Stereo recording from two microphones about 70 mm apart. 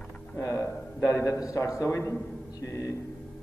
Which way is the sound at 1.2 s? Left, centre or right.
Left.